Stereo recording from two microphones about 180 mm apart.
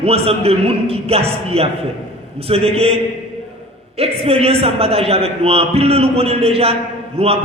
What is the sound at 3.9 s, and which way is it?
A man's voice, 35° right (ahead or behind).